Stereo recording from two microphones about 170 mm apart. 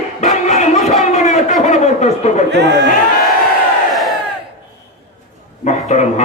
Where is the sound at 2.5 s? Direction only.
90° right.